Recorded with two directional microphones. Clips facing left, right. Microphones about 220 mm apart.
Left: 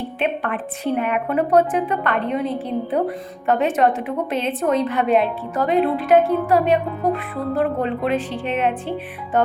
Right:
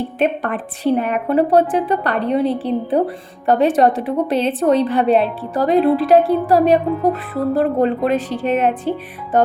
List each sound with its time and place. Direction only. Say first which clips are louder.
0.2 s a woman's voice: right 4 dB; 40° right (ahead or behind)